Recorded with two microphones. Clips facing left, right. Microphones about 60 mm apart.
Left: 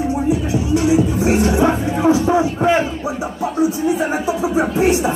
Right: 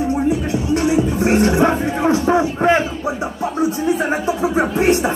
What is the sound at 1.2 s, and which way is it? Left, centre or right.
Music, right.